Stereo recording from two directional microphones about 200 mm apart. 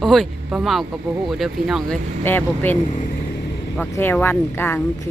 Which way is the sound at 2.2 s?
10° left (ahead or behind).